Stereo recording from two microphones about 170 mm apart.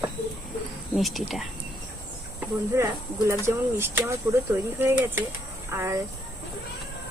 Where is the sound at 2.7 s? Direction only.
15° right (ahead or behind).